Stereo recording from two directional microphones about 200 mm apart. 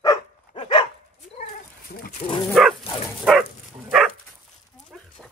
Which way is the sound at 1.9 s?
50° left (ahead or behind).